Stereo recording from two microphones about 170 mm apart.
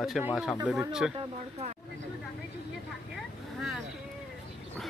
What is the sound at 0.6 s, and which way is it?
Speech, 5° right (ahead or behind).